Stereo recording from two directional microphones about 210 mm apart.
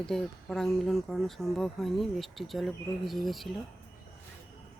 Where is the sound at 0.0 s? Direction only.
5° left (ahead or behind).